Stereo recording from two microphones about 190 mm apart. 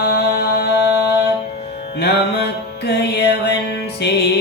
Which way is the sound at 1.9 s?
60° left (ahead or behind).